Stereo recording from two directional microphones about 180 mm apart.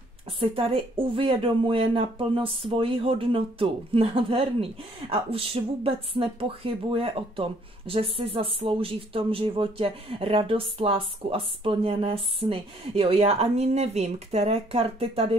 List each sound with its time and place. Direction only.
0.4 s speech: 30° right (ahead or behind)